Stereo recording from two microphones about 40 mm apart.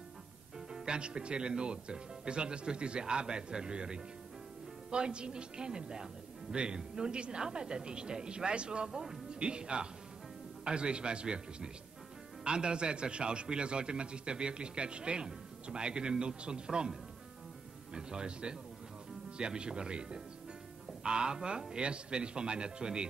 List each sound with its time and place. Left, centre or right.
0.6 s a man's voice: centre
17.9 s a man's voice: right